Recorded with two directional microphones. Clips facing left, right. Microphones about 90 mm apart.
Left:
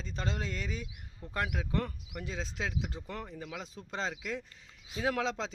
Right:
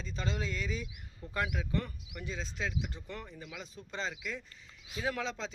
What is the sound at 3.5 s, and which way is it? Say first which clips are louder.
Speech: left 2 dB; 90° left.